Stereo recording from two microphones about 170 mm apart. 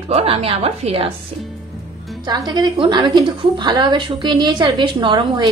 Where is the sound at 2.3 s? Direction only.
25° right (ahead or behind).